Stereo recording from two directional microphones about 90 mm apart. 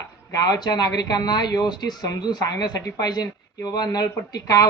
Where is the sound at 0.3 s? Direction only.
45° left (ahead or behind).